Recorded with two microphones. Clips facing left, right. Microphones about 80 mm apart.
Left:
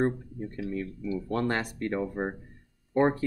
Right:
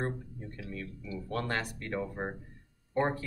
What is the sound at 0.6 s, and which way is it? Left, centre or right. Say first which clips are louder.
Speech: left 9 dB; left.